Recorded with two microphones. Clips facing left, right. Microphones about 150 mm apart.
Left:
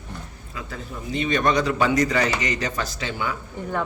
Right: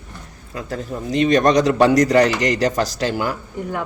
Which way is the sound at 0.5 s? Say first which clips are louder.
Right 8 dB; 40° right (ahead or behind).